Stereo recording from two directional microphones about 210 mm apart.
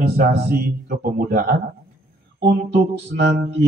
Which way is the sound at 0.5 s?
45° right (ahead or behind).